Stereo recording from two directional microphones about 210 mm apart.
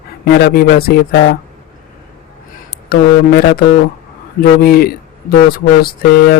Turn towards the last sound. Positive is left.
turn(degrees=45)  # may be behind; listen again after turning